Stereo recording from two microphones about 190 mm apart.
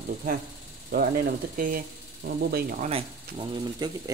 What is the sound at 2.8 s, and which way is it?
Speech, 30° right (ahead or behind).